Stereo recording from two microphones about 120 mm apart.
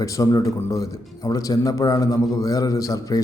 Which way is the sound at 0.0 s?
30° left (ahead or behind).